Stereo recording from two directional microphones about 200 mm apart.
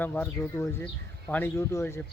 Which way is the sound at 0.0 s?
10° left (ahead or behind).